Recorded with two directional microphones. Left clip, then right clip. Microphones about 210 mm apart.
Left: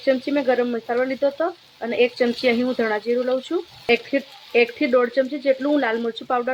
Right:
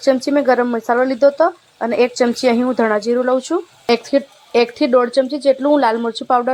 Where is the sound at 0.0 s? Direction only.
10° right (ahead or behind).